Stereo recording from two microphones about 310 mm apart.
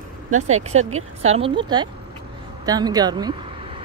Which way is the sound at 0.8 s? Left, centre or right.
Right.